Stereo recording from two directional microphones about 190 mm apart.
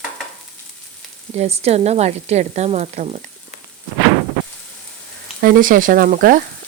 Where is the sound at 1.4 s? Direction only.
35° right (ahead or behind).